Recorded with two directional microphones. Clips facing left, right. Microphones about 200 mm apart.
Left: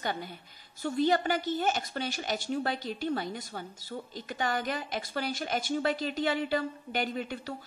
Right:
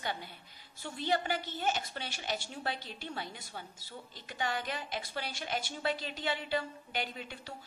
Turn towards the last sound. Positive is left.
turn(degrees=45)  # may be behind; listen again after turning